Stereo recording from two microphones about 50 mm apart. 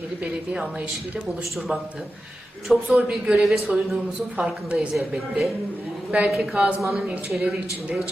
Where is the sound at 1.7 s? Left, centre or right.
Right.